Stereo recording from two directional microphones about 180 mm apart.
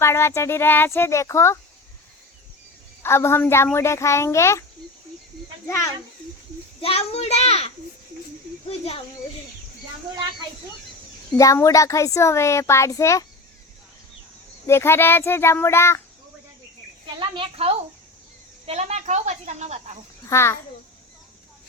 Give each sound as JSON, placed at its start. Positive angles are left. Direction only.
{"t": 0.0, "sound": "a child's voice", "side_deg": 15}
{"t": 3.0, "sound": "a child's voice", "side_deg": 15}
{"t": 5.6, "sound": "a child's voice", "side_deg": 15}
{"t": 6.8, "sound": "a child's voice", "side_deg": 35}
{"t": 8.8, "sound": "a child's voice", "side_deg": 35}
{"t": 11.3, "sound": "a child's voice", "side_deg": 15}
{"t": 14.7, "sound": "a child's voice", "side_deg": 15}
{"t": 17.2, "sound": "speech", "side_deg": -30}
{"t": 20.3, "sound": "a child's voice", "side_deg": 15}